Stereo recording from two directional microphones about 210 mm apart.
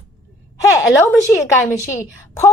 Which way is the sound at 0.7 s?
15° left (ahead or behind).